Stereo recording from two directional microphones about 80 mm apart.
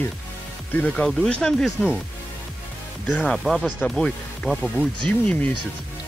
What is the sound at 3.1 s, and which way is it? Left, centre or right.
Speech, centre.